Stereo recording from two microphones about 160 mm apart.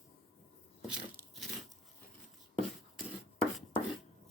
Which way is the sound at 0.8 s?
5° right (ahead or behind).